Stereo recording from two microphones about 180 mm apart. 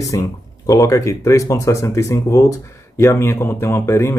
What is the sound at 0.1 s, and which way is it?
Speech, 15° left (ahead or behind).